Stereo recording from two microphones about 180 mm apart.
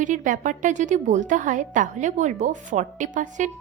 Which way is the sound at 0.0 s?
45° right (ahead or behind).